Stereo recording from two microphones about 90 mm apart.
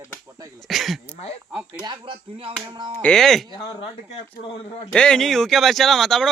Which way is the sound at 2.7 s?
55° right (ahead or behind).